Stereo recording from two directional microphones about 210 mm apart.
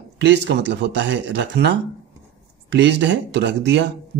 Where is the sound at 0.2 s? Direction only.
55° right (ahead or behind).